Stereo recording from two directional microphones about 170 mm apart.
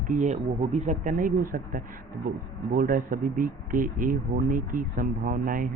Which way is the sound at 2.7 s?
55° right (ahead or behind).